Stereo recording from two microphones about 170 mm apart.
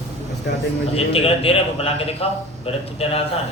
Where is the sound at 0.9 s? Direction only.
35° left (ahead or behind).